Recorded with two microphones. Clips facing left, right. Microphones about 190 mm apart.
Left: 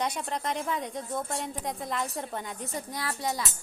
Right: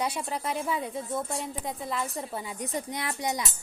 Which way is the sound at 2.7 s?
20° right (ahead or behind).